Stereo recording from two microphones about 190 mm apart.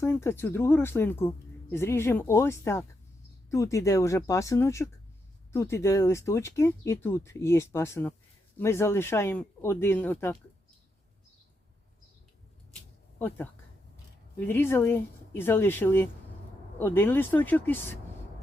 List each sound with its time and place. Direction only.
0.0 s speech: 15° left (ahead or behind)
13.1 s speech: 10° left (ahead or behind)